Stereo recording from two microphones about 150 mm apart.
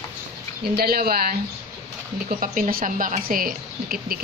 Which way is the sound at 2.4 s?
60° right (ahead or behind).